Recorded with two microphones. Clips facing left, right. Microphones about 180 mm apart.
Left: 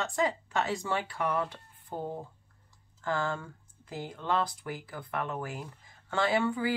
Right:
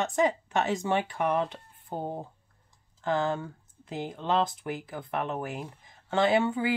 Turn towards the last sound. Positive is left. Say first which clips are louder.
# right 4 dB
turn(degrees=-20)  # may be behind; listen again after turning